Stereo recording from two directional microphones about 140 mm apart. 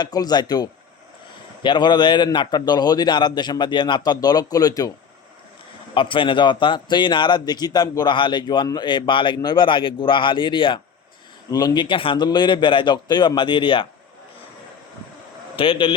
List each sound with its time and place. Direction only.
0.0 s a man's voice: 30° left (ahead or behind)
5.9 s a man's voice: 35° left (ahead or behind)
15.5 s a man's voice: 40° left (ahead or behind)